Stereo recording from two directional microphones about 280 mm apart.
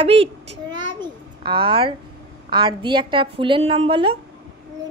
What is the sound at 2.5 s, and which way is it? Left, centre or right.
A woman's voice, centre.